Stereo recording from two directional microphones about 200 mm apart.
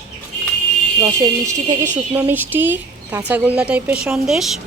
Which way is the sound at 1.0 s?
20° right (ahead or behind).